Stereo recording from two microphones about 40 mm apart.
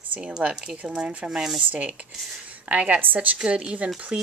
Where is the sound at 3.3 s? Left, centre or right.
Right.